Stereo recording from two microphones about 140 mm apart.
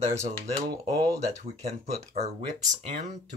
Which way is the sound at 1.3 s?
50° right (ahead or behind).